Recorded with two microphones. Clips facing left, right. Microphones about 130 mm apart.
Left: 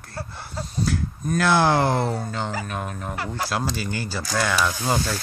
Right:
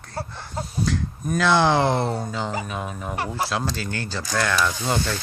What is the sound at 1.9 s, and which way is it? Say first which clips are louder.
Speech: even; 25° right (ahead or behind).